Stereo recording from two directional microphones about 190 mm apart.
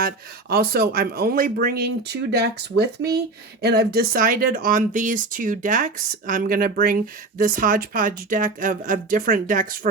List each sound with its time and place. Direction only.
0.0 s speech: 55° right (ahead or behind)